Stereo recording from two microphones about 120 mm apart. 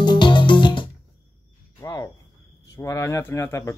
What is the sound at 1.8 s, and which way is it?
Cricket, 30° left (ahead or behind).